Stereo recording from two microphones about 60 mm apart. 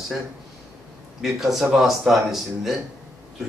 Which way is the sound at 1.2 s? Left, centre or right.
Centre.